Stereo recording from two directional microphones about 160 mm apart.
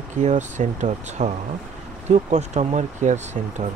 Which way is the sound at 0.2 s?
50° right (ahead or behind).